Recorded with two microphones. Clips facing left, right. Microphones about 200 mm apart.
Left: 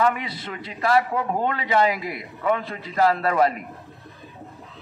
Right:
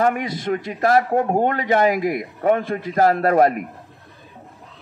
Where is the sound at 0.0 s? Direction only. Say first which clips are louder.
Right 3 dB; 45° right (ahead or behind).